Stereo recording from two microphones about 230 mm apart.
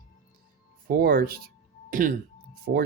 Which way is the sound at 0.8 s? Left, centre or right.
Right.